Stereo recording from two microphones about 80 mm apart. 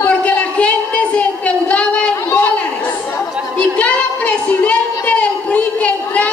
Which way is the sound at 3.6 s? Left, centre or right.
Centre.